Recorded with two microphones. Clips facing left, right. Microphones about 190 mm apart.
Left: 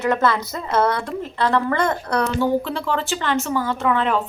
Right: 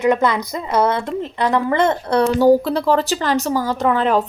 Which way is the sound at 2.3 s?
40° right (ahead or behind).